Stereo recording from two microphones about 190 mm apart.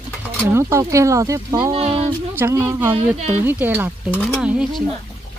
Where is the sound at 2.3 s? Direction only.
10° right (ahead or behind).